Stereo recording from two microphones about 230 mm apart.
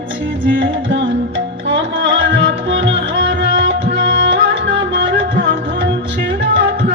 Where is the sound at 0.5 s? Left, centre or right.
Right.